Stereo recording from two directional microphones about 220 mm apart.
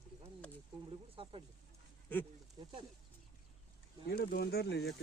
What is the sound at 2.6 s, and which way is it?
Speech, 20° right (ahead or behind).